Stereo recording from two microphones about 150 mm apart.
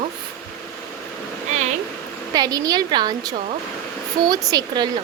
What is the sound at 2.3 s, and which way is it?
Speech, 25° right (ahead or behind).